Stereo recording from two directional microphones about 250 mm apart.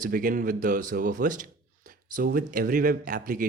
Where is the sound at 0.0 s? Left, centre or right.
Right.